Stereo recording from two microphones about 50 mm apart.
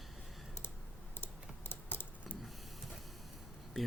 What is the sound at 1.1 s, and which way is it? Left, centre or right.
Computer keyboard, left.